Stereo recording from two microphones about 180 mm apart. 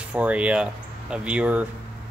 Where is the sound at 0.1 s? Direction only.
10° right (ahead or behind).